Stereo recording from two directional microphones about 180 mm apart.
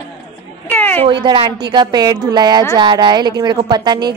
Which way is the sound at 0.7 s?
10° left (ahead or behind).